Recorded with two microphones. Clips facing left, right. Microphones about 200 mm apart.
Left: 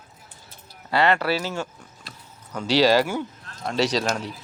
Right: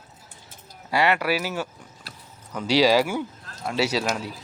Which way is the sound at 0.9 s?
10° right (ahead or behind).